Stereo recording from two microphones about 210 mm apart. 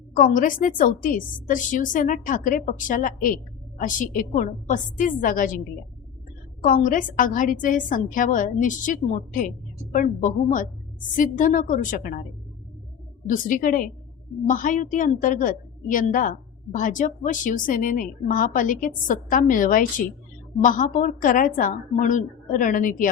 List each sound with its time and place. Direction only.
0.1 s a woman's voice: 40° left (ahead or behind)
13.2 s a woman's voice: 40° left (ahead or behind)